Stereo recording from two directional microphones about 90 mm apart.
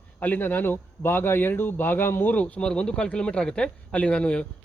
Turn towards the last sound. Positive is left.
turn(degrees=10)  # may be behind; listen again after turning